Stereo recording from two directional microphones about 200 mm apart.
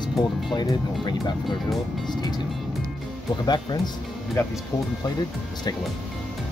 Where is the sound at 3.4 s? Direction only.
20° left (ahead or behind).